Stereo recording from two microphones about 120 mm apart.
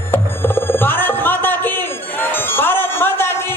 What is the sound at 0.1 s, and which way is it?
Music, 20° left (ahead or behind).